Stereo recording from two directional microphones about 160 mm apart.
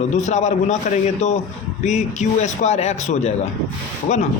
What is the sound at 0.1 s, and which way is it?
A man's voice, 45° left (ahead or behind).